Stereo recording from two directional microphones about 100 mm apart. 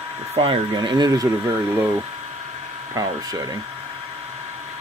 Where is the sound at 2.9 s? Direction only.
40° right (ahead or behind).